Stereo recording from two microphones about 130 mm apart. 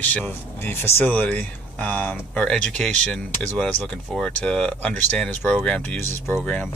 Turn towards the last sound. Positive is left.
turn(degrees=10)  # may be behind; listen again after turning